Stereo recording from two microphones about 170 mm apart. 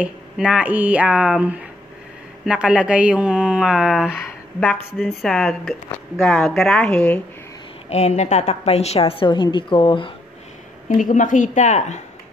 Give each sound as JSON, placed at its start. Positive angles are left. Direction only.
{"t": 0.0, "sound": "speech", "side_deg": -5}
{"t": 7.9, "sound": "a woman's voice", "side_deg": 40}
{"t": 10.9, "sound": "a woman's voice", "side_deg": 50}